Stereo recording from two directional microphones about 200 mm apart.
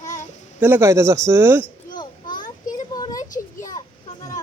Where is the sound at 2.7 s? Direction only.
20° left (ahead or behind).